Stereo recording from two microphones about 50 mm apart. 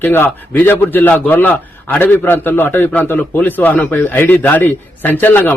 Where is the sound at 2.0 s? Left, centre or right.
Left.